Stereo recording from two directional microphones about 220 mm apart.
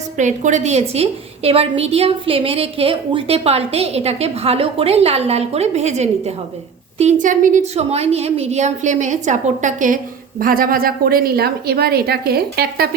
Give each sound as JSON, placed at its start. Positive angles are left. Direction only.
{"t": 0.2, "sound": "a woman's voice", "side_deg": -35}